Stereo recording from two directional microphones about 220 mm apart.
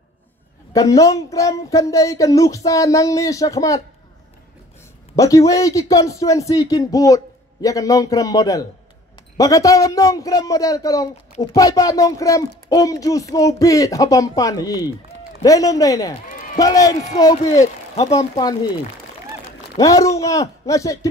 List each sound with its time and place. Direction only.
0.7 s speech: 15° left (ahead or behind)
5.1 s speech: 15° left (ahead or behind)
17.9 s speech: 30° left (ahead or behind)
19.8 s speech: 15° left (ahead or behind)